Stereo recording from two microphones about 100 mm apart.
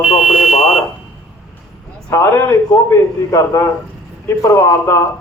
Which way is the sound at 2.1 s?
35° left (ahead or behind).